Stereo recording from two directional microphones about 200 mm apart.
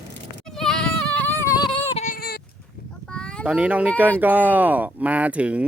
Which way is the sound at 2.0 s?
45° left (ahead or behind).